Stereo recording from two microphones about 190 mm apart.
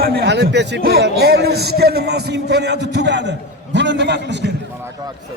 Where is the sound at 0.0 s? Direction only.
60° right (ahead or behind).